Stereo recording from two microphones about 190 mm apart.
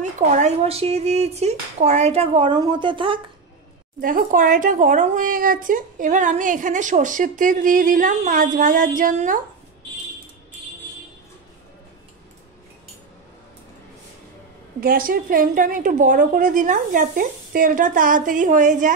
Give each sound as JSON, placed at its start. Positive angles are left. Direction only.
{"t": 0.3, "sound": "speech", "side_deg": -35}
{"t": 4.0, "sound": "speech", "side_deg": -45}
{"t": 14.8, "sound": "speech", "side_deg": -50}